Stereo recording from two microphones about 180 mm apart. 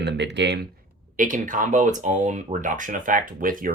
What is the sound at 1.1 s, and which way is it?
Speech, 45° right (ahead or behind).